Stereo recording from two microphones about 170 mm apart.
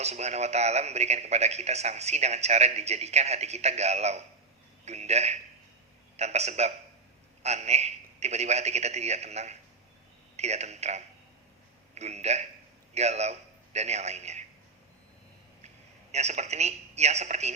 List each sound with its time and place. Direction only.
0.0 s a man's voice: 40° right (ahead or behind)
16.1 s speech: 40° right (ahead or behind)